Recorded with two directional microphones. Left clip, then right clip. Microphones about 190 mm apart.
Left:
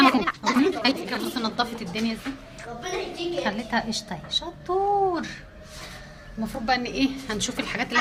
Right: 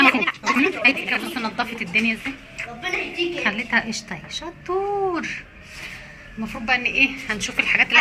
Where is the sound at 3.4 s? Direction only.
Centre (ahead or behind).